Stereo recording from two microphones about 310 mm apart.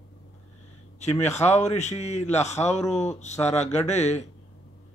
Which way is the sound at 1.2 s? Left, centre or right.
Left.